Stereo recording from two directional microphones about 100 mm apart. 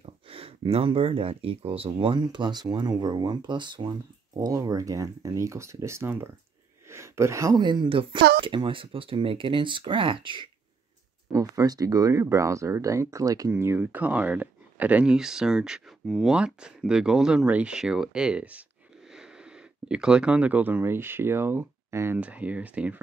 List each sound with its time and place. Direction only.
0.0 s speech: 70° right (ahead or behind); by 6.3 s 25° right (ahead or behind)
6.9 s a sound: 30° right (ahead or behind)
7.5 s speech: 50° right (ahead or behind)
11.3 s speech: 35° right (ahead or behind)
13.5 s speech: 25° right (ahead or behind)
22.2 s speech: 15° right (ahead or behind)